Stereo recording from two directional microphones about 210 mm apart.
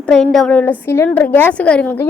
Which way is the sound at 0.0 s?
5° left (ahead or behind).